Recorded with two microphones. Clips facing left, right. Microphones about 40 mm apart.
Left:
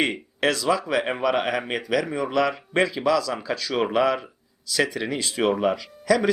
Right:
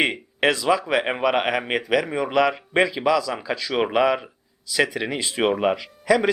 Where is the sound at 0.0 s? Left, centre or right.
Right.